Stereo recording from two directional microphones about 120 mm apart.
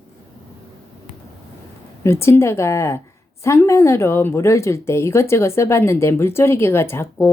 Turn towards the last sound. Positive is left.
turn(degrees=20)  # may be behind; listen again after turning